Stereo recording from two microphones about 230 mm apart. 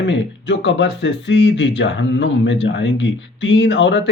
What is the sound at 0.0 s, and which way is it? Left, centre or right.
Speech, left.